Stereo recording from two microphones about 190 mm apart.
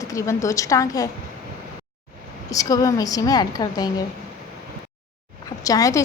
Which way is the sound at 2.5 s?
20° left (ahead or behind).